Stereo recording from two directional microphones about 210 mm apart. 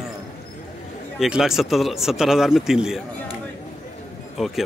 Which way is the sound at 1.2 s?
Centre (ahead or behind).